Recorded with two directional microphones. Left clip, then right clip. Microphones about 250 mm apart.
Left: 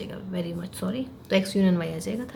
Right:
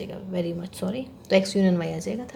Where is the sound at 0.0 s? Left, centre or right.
Centre.